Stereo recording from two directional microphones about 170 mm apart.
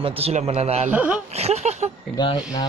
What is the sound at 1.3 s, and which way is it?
Speech, 40° right (ahead or behind).